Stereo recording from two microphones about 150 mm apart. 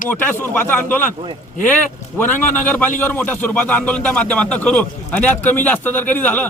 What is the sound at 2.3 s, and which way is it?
Speech, 10° left (ahead or behind).